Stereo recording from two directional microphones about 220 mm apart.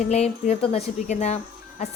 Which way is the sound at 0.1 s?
30° left (ahead or behind).